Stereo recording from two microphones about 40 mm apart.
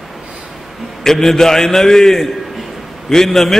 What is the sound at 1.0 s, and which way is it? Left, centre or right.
A man's voice, centre.